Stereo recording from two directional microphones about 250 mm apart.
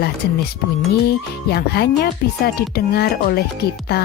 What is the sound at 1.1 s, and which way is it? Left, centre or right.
Speech, left.